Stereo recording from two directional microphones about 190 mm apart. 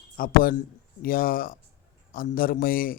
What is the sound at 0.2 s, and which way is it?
Speech, 50° left (ahead or behind).